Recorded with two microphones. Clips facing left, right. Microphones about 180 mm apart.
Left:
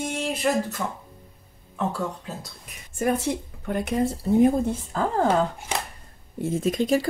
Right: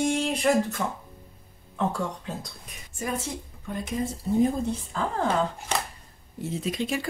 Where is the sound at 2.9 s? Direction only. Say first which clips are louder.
Left 8 dB; 65° left (ahead or behind).